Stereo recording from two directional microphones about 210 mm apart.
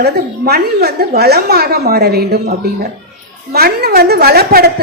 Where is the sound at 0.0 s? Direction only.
50° right (ahead or behind).